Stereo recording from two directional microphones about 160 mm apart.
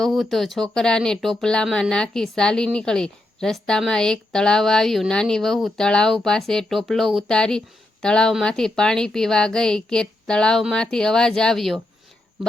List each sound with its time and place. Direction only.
0.0 s speech: centre (ahead or behind)